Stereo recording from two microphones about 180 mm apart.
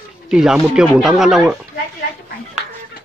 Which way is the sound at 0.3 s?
5° right (ahead or behind).